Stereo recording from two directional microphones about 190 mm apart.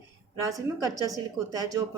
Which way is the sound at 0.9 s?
20° right (ahead or behind).